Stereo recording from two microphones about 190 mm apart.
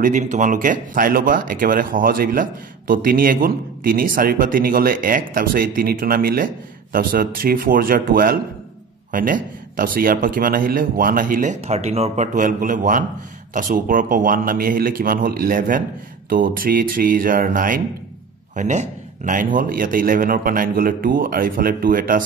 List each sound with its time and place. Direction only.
0.0 s speech: 40° right (ahead or behind)